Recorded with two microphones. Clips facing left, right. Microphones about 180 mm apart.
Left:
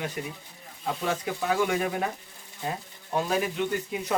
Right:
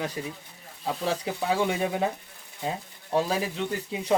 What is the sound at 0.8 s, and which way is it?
Speech, 30° right (ahead or behind).